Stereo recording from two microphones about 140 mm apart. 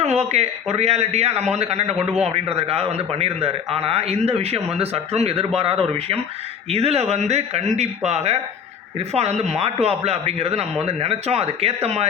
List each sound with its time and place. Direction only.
0.0 s speech: 50° right (ahead or behind)